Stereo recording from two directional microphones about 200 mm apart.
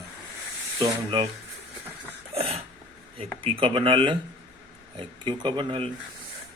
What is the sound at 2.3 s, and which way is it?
Sneeze, 30° right (ahead or behind).